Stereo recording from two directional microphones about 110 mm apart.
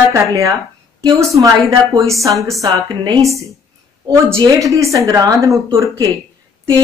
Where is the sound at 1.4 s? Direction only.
30° right (ahead or behind).